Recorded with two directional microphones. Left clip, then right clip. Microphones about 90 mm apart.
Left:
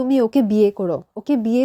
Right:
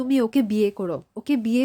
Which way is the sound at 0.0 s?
25° left (ahead or behind).